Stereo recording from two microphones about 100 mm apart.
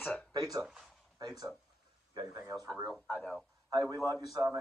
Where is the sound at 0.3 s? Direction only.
45° right (ahead or behind).